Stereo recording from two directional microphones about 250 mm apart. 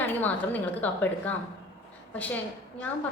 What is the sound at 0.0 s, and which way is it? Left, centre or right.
A woman's voice, centre.